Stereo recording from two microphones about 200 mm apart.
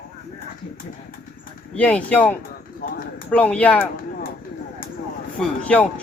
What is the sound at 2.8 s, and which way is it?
Speech, 45° left (ahead or behind).